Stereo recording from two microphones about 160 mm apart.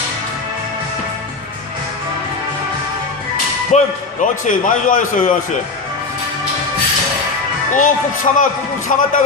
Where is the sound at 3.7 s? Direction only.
45° left (ahead or behind).